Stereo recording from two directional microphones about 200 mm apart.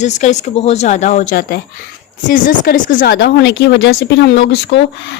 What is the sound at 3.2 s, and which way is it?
Speech, 60° left (ahead or behind).